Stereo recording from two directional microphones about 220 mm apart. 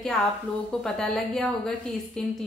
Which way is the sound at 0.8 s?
Centre (ahead or behind).